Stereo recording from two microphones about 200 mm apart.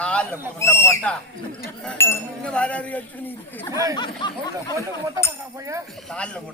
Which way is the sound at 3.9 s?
20° left (ahead or behind).